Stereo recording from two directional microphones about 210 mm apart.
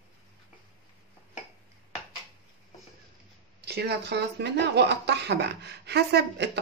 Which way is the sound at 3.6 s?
50° right (ahead or behind).